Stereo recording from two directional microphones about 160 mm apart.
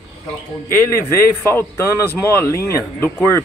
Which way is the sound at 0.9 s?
15° left (ahead or behind).